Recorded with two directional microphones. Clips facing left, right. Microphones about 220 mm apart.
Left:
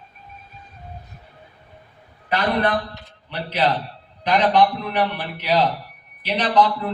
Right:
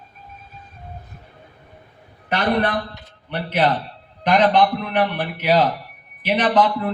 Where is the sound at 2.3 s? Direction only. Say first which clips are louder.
Right 1 dB; 45° right (ahead or behind).